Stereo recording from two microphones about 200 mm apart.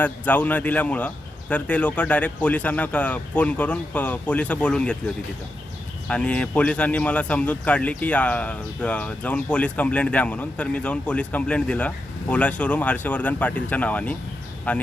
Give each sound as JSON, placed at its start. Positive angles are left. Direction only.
{"t": 0.0, "sound": "speech", "side_deg": 10}
{"t": 6.1, "sound": "speech", "side_deg": 5}